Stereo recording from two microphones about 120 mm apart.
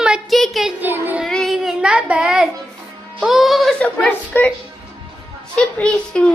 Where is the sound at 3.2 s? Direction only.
Centre (ahead or behind).